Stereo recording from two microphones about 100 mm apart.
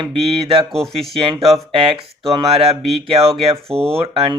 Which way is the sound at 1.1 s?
70° right (ahead or behind).